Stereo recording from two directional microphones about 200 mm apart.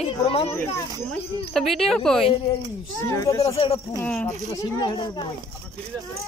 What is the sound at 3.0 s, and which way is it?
Speech, 15° left (ahead or behind).